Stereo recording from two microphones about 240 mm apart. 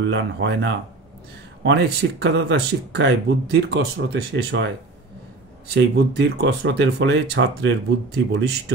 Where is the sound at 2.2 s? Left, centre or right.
Right.